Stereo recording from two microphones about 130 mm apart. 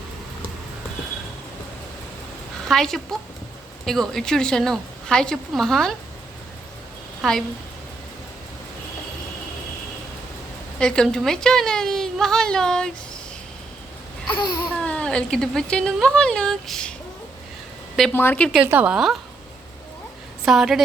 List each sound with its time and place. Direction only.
2.6 s a woman's voice: 5° left (ahead or behind)
7.2 s a woman's voice: 5° left (ahead or behind)
10.8 s a woman's voice: 5° left (ahead or behind)
14.3 s a sound: 35° left (ahead or behind)
14.7 s a woman's voice: 10° left (ahead or behind)
18.1 s a woman's voice: 15° left (ahead or behind)
18.5 s speech: 10° right (ahead or behind)
20.4 s a woman's voice: 5° right (ahead or behind)